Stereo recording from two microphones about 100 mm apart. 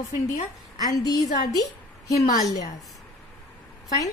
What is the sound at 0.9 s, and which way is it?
Speech, 40° left (ahead or behind).